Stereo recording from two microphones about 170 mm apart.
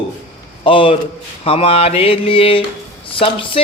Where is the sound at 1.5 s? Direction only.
35° left (ahead or behind).